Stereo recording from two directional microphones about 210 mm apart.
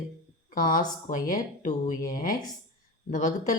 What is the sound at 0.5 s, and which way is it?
A woman's voice, 40° left (ahead or behind).